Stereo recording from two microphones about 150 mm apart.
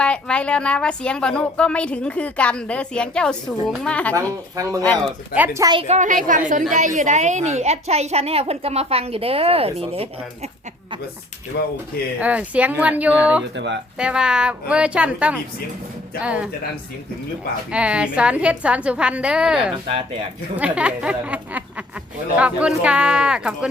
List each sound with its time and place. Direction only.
0.0 s speech: 5° left (ahead or behind)
4.1 s speech: 20° right (ahead or behind)
5.3 s a woman's voice: 10° right (ahead or behind)
5.9 s a woman's voice: 55° right (ahead or behind); by 10.5 s 40° right (ahead or behind)
11.5 s speech: 90° left
12.2 s a woman's voice: 10° right (ahead or behind)
17.7 s a woman's voice: 5° right (ahead or behind)